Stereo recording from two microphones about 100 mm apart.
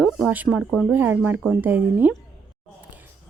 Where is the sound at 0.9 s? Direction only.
20° right (ahead or behind).